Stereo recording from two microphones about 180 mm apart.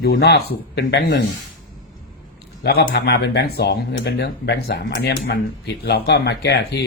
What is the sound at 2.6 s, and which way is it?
Speech, 65° left (ahead or behind).